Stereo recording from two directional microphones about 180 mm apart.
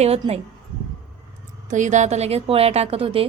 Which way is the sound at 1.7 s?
40° right (ahead or behind).